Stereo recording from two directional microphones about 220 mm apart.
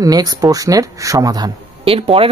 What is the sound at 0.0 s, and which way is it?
A man's voice, 15° right (ahead or behind).